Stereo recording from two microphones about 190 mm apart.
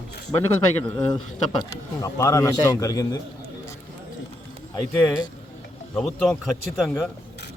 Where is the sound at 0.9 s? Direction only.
20° left (ahead or behind).